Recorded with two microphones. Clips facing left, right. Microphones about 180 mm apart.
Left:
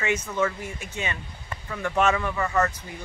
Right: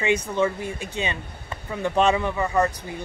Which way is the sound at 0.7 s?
30° right (ahead or behind).